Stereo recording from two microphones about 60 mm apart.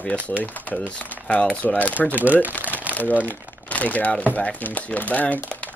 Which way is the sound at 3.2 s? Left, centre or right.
Left.